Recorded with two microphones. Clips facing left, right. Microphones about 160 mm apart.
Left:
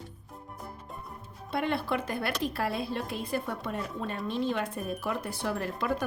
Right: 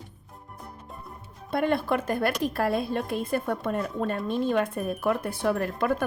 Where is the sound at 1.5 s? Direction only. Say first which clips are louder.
Right 5 dB; 50° right (ahead or behind).